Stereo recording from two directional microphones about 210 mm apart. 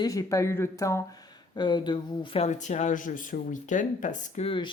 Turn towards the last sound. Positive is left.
turn(degrees=25)  # may be behind; listen again after turning